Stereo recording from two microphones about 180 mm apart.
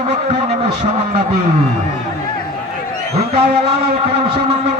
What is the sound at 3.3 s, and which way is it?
A man's voice, 35° right (ahead or behind).